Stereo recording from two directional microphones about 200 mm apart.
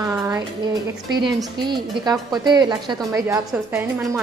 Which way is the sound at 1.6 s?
20° right (ahead or behind).